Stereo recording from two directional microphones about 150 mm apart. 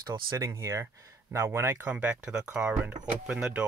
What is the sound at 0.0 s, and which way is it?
Speech, 25° right (ahead or behind).